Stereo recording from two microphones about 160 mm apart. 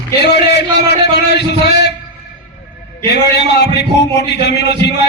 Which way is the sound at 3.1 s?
90° left.